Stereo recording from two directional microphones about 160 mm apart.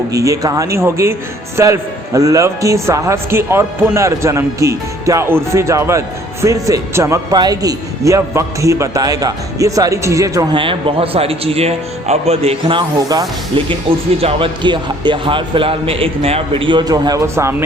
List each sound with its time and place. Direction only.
0.1 s a man's voice: 20° right (ahead or behind)